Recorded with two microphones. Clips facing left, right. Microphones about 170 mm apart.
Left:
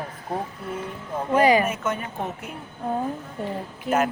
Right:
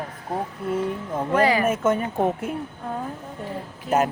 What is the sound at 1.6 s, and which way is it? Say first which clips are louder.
Speech: right 6 dB; 45° right (ahead or behind).